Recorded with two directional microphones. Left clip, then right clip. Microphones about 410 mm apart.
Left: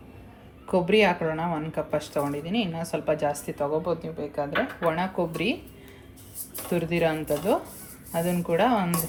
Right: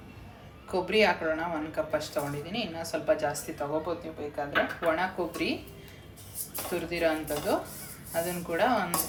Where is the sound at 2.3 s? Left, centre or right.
Centre.